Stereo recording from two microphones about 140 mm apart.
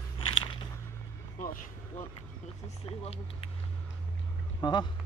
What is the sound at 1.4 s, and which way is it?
Speech, 75° left (ahead or behind).